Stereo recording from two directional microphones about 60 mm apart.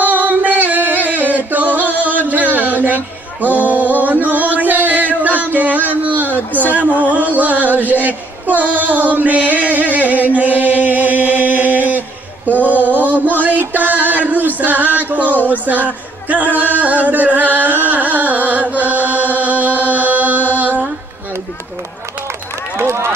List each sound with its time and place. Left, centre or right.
0.0 s music: right
2.3 s male singing: right
4.0 s music: right
6.3 s speech: left
6.7 s a sound: right
12.9 s music: right
15.4 s singing: right
22.8 s run: right